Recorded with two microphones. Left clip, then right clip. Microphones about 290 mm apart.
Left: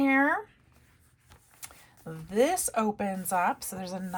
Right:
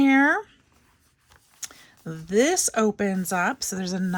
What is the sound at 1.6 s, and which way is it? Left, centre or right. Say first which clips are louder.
Speech: right 9 dB; right.